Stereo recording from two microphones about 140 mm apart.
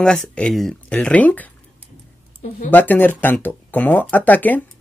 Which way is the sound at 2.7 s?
15° left (ahead or behind).